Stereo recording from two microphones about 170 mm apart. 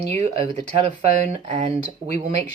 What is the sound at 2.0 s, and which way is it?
Speech, 40° right (ahead or behind).